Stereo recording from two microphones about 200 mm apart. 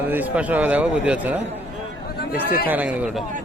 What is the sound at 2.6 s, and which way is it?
Speech, 5° right (ahead or behind).